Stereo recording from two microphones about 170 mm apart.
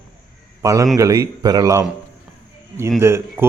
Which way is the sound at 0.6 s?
20° right (ahead or behind).